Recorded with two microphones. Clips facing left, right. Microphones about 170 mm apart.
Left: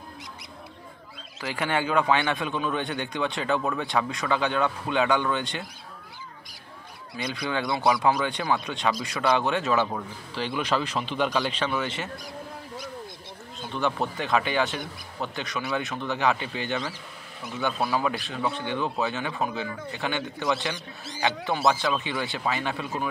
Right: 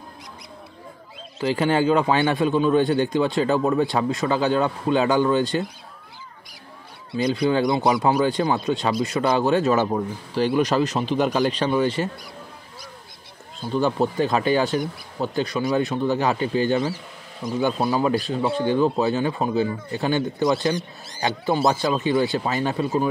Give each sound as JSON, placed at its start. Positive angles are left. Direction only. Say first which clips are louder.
{"t": 1.4, "sound": "speech", "louder": "right 8 dB", "side_deg": -30}
{"t": 7.1, "sound": "speech", "louder": "right 10 dB", "side_deg": -35}
{"t": 13.6, "sound": "speech", "louder": "right 6 dB", "side_deg": -35}